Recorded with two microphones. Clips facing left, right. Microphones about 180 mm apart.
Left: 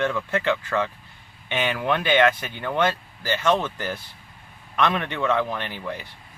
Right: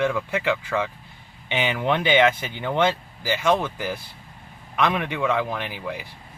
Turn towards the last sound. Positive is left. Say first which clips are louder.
# right 1 dB
turn(degrees=-10)  # may be behind; listen again after turning